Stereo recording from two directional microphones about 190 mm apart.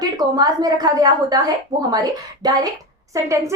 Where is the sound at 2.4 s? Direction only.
20° right (ahead or behind).